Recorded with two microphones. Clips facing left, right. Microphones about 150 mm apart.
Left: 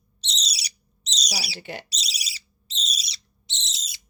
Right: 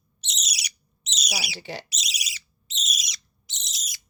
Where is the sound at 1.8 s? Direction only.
35° left (ahead or behind).